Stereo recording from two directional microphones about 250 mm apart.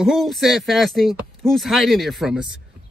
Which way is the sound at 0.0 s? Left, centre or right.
Centre.